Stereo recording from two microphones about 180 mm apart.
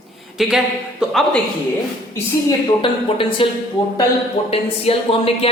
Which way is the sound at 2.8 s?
30° left (ahead or behind).